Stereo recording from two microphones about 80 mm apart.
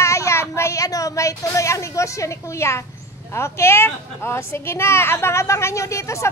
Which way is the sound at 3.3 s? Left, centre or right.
Left.